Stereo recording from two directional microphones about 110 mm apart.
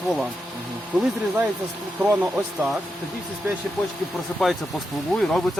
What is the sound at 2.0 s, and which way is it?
Speech, 15° right (ahead or behind).